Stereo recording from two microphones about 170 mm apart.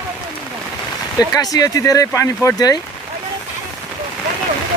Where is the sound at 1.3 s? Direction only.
20° left (ahead or behind).